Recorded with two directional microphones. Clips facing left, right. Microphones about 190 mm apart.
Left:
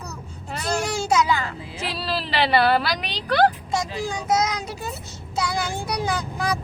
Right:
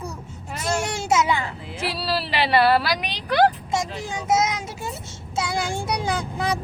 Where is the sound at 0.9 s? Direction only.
25° right (ahead or behind).